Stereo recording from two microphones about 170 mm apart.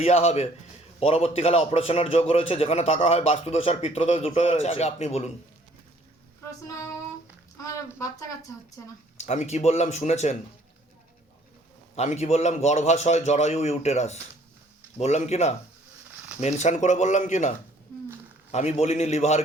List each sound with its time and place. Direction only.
0.0 s a man's voice: 40° left (ahead or behind)
7.6 s speech: 20° left (ahead or behind)
9.1 s a man's voice: 40° left (ahead or behind)
11.9 s a man's voice: 40° left (ahead or behind)
18.5 s a man's voice: 40° left (ahead or behind)